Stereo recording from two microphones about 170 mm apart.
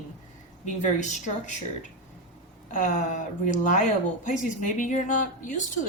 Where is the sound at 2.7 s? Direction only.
50° left (ahead or behind).